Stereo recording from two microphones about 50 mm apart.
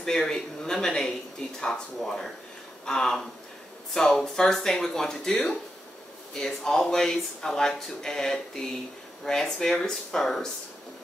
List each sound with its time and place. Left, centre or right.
0.0 s speech: centre